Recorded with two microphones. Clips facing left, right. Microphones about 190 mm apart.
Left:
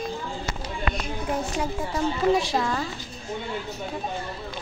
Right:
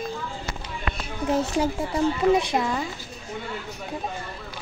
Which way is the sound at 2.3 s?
20° right (ahead or behind).